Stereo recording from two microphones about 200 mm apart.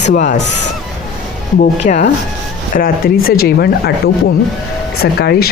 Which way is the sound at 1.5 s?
40° left (ahead or behind).